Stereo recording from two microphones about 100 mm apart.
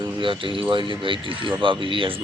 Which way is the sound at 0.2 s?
60° right (ahead or behind).